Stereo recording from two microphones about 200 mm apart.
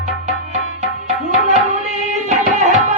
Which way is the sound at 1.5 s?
35° right (ahead or behind).